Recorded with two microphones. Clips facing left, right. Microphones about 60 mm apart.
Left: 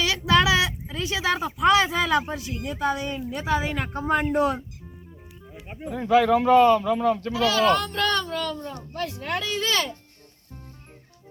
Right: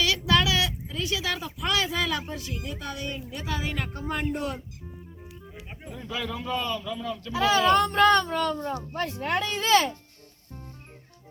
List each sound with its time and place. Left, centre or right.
0.0 s speech: left
5.9 s speech: left
7.3 s speech: centre
9.4 s speech: centre